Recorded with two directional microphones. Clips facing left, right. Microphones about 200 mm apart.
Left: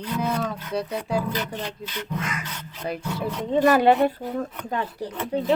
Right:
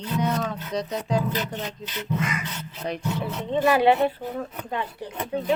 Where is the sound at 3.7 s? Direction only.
45° left (ahead or behind).